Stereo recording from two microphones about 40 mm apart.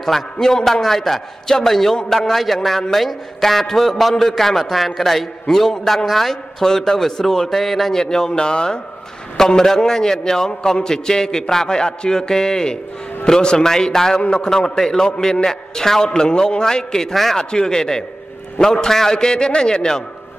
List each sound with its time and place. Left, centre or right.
0.0 s a man's voice: centre
14.1 s a man's voice: left
17.1 s a man's voice: centre
17.4 s a man's voice: centre